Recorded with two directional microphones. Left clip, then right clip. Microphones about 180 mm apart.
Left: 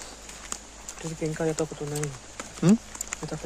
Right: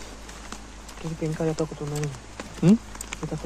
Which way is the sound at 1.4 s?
90° left.